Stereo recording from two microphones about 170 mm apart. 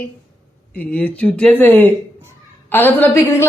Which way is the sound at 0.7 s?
10° left (ahead or behind).